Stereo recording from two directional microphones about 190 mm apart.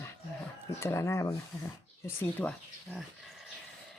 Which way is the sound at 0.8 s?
15° left (ahead or behind).